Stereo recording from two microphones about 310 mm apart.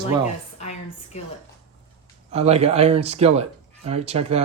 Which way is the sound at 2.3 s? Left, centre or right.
Right.